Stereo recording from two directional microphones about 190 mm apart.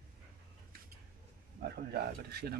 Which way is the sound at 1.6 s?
55° right (ahead or behind).